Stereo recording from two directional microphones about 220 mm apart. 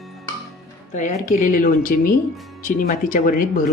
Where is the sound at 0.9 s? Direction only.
35° left (ahead or behind).